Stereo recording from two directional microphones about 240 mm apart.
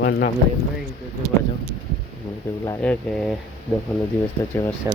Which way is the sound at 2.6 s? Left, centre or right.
Centre.